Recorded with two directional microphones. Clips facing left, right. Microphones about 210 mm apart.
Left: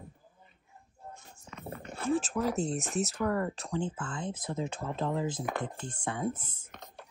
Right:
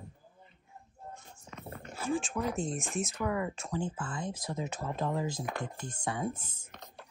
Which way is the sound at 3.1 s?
Centre (ahead or behind).